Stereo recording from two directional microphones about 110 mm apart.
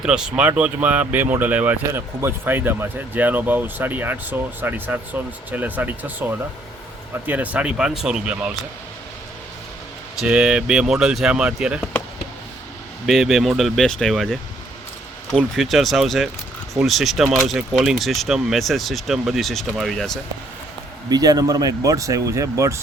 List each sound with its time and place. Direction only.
0.0 s speech: 5° right (ahead or behind)
10.2 s speech: 10° right (ahead or behind)
13.1 s speech: centre (ahead or behind)
21.1 s speech: 35° right (ahead or behind)